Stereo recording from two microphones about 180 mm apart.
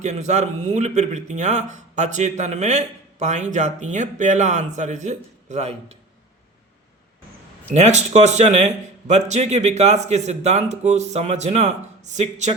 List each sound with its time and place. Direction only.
0.0 s speech: 40° right (ahead or behind)
7.7 s speech: 40° right (ahead or behind)